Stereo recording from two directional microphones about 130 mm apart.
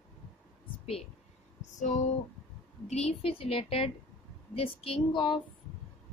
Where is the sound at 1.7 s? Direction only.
70° left (ahead or behind).